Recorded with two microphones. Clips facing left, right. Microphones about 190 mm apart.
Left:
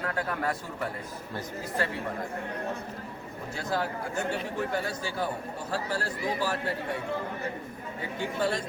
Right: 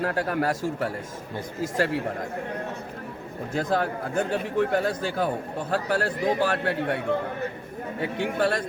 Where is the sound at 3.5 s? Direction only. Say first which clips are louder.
Right 6 dB; 50° right (ahead or behind).